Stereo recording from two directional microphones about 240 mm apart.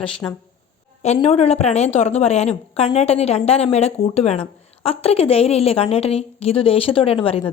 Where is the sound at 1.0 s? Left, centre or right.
Left.